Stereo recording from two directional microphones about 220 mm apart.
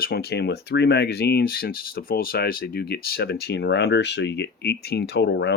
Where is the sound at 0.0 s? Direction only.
45° left (ahead or behind).